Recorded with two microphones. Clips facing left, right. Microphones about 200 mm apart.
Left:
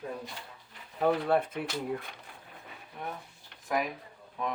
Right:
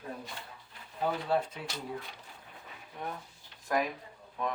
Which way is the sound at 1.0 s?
55° left (ahead or behind).